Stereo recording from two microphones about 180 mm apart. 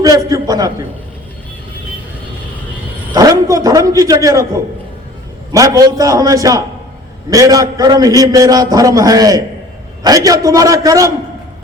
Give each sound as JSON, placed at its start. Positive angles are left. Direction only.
{"t": 0.0, "sound": "a sound", "side_deg": -20}
{"t": 3.1, "sound": "a man's voice", "side_deg": -20}
{"t": 5.5, "sound": "a man's voice", "side_deg": -20}